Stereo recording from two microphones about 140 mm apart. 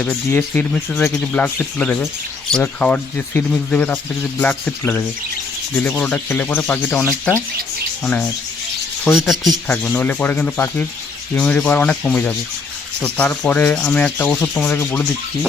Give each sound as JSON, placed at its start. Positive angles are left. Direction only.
{"t": 0.0, "sound": "speech", "side_deg": 10}
{"t": 9.8, "sound": "speech", "side_deg": 10}